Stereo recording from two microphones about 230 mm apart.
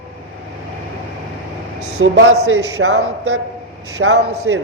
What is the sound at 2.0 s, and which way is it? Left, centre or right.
A man's voice, right.